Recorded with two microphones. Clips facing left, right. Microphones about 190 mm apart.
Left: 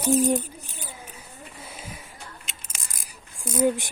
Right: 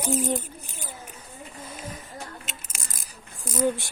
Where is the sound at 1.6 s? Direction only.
10° left (ahead or behind).